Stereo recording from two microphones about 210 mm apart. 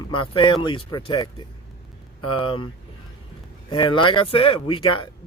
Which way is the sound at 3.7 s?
25° left (ahead or behind).